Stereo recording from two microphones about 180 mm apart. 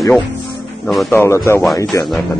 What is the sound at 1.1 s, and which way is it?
Speech, 10° left (ahead or behind).